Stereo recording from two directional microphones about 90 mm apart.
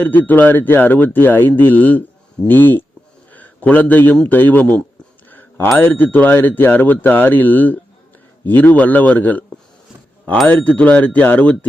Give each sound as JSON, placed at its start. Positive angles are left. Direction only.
{"t": 0.0, "sound": "a man's voice", "side_deg": 20}
{"t": 5.3, "sound": "a sound", "side_deg": 20}
{"t": 5.7, "sound": "speech", "side_deg": 20}
{"t": 10.4, "sound": "speech", "side_deg": 15}